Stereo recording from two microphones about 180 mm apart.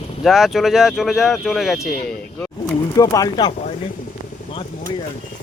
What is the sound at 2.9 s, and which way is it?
Speech, 20° left (ahead or behind).